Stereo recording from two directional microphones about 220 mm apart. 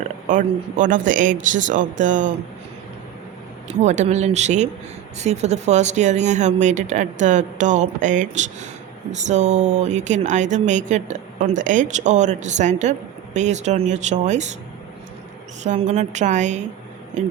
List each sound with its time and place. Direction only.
0.3 s speech: 35° right (ahead or behind)
3.8 s speech: 30° right (ahead or behind)
15.6 s speech: 30° right (ahead or behind)